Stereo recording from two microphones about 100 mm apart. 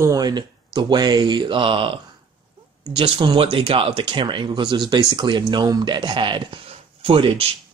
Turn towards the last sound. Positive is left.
turn(degrees=-60)  # may be behind; listen again after turning